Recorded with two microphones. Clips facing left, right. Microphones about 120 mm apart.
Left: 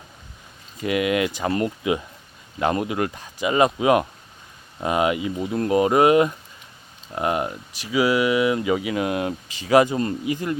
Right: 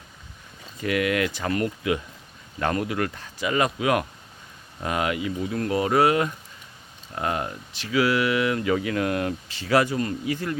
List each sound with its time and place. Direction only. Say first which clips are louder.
0.8 s speech: left 2 dB; 20° left (ahead or behind)